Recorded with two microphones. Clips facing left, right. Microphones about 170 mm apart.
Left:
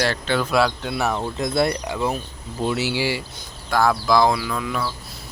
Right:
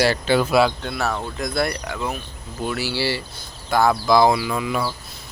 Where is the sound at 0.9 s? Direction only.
20° left (ahead or behind).